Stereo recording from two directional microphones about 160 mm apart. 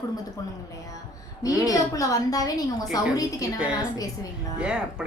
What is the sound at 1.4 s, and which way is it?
A woman's voice, 20° left (ahead or behind).